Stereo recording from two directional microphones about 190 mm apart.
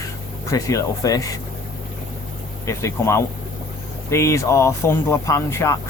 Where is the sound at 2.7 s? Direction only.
15° left (ahead or behind).